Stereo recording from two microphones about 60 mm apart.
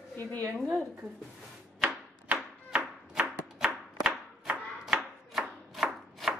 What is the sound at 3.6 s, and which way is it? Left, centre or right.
Chopping, centre.